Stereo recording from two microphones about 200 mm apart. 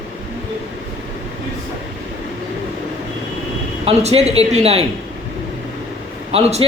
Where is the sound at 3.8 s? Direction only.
30° right (ahead or behind).